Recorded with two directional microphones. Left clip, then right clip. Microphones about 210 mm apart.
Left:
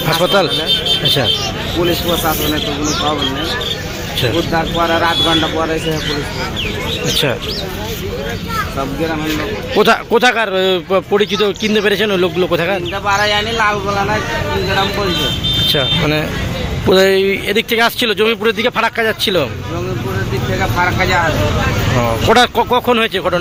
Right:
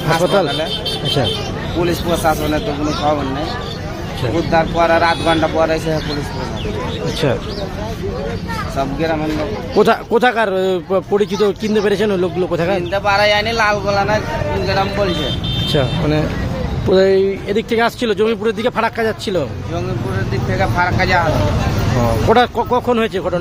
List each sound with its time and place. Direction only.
0.1 s speech: 5° right (ahead or behind)
4.5 s speech: 20° right (ahead or behind)
9.7 s speech: centre (ahead or behind)
12.9 s speech: 20° right (ahead or behind)
15.6 s speech: centre (ahead or behind)
20.6 s speech: 20° right (ahead or behind)
21.9 s speech: centre (ahead or behind)